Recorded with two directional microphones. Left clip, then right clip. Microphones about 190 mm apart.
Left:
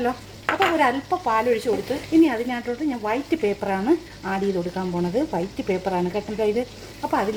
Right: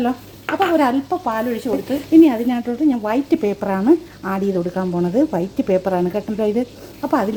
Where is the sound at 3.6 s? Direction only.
15° right (ahead or behind).